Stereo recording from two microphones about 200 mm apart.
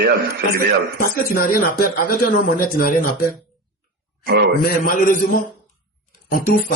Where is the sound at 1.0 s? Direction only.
45° left (ahead or behind).